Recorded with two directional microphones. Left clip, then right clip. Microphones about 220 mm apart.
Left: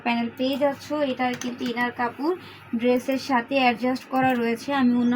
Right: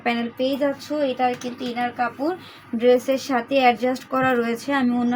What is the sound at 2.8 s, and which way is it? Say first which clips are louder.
Speech: right 6 dB; 40° right (ahead or behind).